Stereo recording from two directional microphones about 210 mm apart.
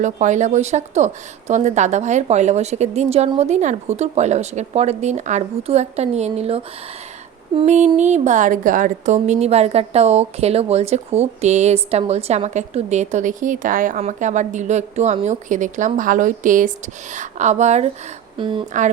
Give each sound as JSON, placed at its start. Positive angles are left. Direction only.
{"t": 0.0, "sound": "a woman's voice", "side_deg": -35}